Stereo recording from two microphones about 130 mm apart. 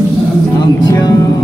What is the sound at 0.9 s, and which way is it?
Music, 30° left (ahead or behind).